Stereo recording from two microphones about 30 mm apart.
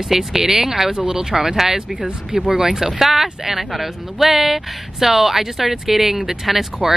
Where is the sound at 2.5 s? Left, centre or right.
Centre.